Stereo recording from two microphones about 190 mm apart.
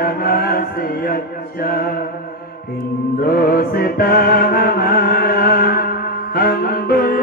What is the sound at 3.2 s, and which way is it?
Mantra, 50° left (ahead or behind).